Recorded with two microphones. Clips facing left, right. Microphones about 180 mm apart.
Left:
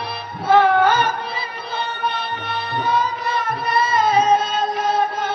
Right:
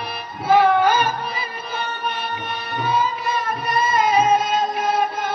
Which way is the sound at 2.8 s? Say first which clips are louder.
Right 1 dB; 15° right (ahead or behind).